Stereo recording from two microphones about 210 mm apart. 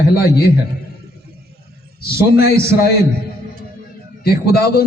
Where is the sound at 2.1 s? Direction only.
45° left (ahead or behind).